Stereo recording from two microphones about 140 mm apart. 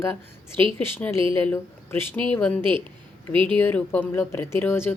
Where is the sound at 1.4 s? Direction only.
15° left (ahead or behind).